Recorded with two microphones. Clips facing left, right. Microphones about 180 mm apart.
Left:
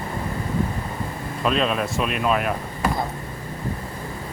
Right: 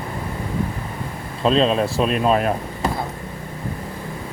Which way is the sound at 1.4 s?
30° right (ahead or behind).